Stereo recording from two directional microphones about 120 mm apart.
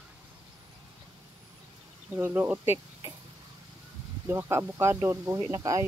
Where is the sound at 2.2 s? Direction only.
15° right (ahead or behind).